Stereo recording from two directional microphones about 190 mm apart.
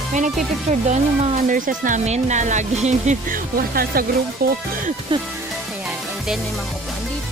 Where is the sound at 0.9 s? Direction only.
35° right (ahead or behind).